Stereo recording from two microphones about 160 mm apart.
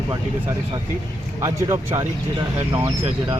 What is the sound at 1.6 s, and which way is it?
Speech, 15° right (ahead or behind).